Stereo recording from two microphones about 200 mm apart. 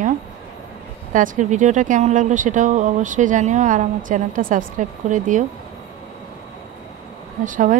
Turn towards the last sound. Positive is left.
turn(degrees=-40)  # may be behind; listen again after turning